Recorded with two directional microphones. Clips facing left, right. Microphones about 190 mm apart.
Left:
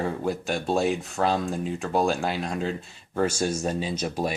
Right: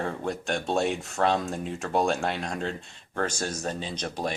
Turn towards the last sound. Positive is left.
turn(degrees=5)  # may be behind; listen again after turning